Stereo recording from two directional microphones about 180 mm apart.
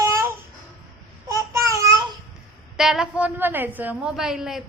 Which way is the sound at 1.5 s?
15° right (ahead or behind).